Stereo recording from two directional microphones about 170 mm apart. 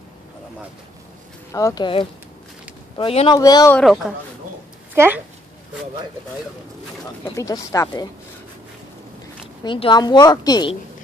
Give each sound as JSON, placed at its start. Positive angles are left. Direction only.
{"t": 1.5, "sound": "a woman's voice", "side_deg": 20}
{"t": 3.0, "sound": "speech", "side_deg": 35}
{"t": 3.3, "sound": "a woman's voice", "side_deg": 20}
{"t": 3.7, "sound": "a woman's voice", "side_deg": 0}
{"t": 4.9, "sound": "speech", "side_deg": -15}
{"t": 7.2, "sound": "a woman's voice", "side_deg": 20}
{"t": 9.6, "sound": "a woman's voice", "side_deg": 30}